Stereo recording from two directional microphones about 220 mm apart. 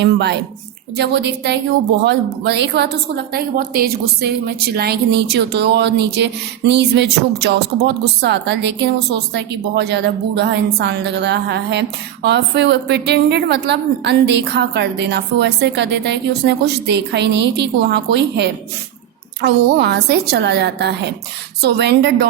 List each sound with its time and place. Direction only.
0.0 s a woman's voice: 50° right (ahead or behind)